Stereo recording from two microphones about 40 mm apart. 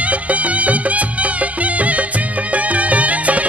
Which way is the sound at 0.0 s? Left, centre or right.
Right.